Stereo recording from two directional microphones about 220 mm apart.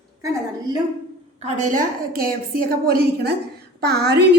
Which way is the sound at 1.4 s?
30° right (ahead or behind).